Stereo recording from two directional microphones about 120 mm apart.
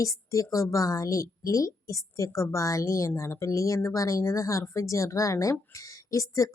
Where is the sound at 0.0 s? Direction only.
30° left (ahead or behind).